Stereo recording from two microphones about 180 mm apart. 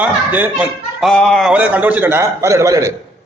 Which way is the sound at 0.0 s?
10° right (ahead or behind).